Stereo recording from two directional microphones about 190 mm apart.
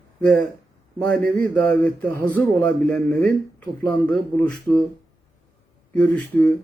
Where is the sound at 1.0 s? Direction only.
5° left (ahead or behind).